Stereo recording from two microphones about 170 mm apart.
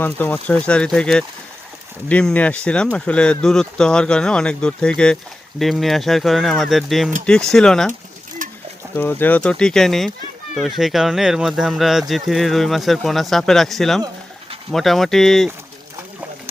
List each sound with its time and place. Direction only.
0.0 s speech: 10° left (ahead or behind)
8.4 s bird: 50° right (ahead or behind)
9.0 s speech: 10° left (ahead or behind)